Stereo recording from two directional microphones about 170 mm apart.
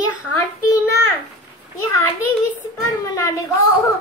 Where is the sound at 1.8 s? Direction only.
20° left (ahead or behind).